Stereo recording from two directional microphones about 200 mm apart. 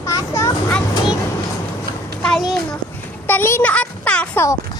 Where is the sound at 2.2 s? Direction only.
Centre (ahead or behind).